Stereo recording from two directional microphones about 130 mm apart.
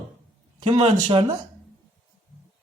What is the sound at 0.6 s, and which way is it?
Speech, 45° right (ahead or behind).